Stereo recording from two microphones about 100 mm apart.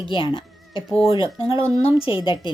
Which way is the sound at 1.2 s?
35° right (ahead or behind).